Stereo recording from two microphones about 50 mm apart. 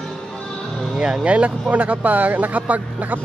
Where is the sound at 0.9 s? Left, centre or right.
Centre.